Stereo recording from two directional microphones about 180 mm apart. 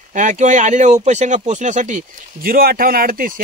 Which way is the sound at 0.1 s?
45° right (ahead or behind).